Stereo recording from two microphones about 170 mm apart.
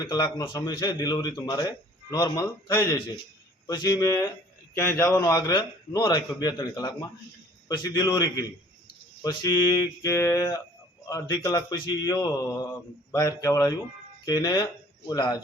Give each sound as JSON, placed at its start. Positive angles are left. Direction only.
{"t": 0.0, "sound": "a man's voice", "side_deg": 25}